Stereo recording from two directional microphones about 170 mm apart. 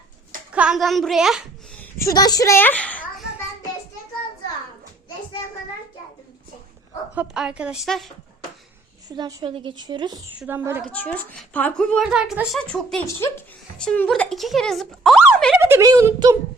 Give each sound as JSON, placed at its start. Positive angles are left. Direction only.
{"t": 0.5, "sound": "a woman's voice", "side_deg": -5}
{"t": 1.8, "sound": "a child's voice", "side_deg": 15}
{"t": 7.2, "sound": "a woman's voice", "side_deg": -5}
{"t": 9.0, "sound": "a woman's voice", "side_deg": -20}
{"t": 10.4, "sound": "speech", "side_deg": -10}
{"t": 10.8, "sound": "a woman's voice", "side_deg": 10}
{"t": 15.5, "sound": "a sound", "side_deg": -15}
{"t": 15.9, "sound": "speech", "side_deg": -20}